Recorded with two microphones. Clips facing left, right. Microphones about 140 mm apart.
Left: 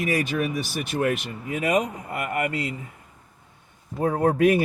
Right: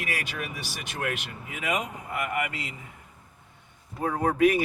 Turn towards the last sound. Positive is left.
turn(degrees=45)  # may be behind; listen again after turning